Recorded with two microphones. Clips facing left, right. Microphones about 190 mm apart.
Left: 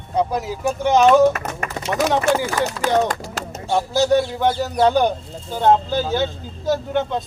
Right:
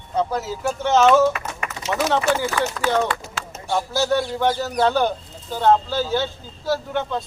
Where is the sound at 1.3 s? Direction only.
45° left (ahead or behind).